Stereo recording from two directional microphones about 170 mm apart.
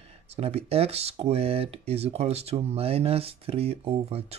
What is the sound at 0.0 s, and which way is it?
Speech, 35° right (ahead or behind).